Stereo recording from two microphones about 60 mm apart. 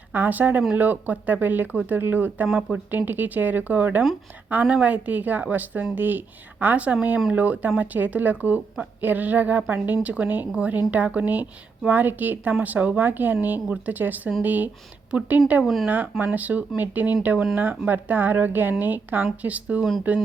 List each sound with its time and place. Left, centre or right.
0.1 s a woman's voice: right
2.5 s speech: centre
2.7 s a woman's voice: right
15.6 s speech: centre
15.9 s a woman's voice: right